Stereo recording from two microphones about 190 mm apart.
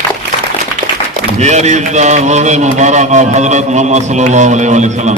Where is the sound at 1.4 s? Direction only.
35° right (ahead or behind).